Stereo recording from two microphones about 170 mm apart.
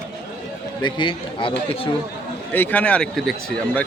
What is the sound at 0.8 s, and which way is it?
Speech, 30° left (ahead or behind).